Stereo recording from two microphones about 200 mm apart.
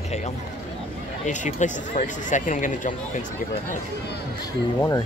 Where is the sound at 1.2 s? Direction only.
35° left (ahead or behind).